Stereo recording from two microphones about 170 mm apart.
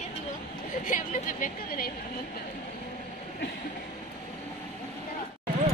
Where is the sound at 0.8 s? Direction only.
55° left (ahead or behind).